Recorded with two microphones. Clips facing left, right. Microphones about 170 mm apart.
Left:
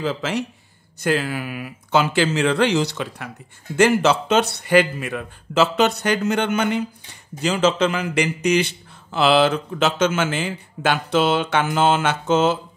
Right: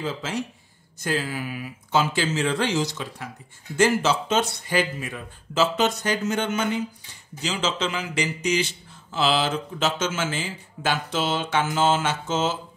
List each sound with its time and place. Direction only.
0.0 s a man's voice: 75° left (ahead or behind)
7.4 s a man's voice: 55° left (ahead or behind)